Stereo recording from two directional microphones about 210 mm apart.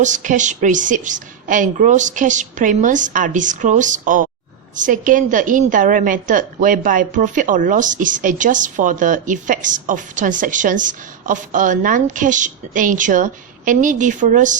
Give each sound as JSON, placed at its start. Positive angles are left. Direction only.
{"t": 0.0, "sound": "a woman's voice", "side_deg": -35}